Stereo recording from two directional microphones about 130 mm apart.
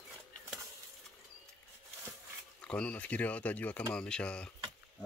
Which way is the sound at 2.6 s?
10° left (ahead or behind).